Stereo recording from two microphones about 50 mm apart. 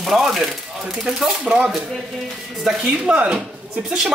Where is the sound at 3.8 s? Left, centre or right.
Centre.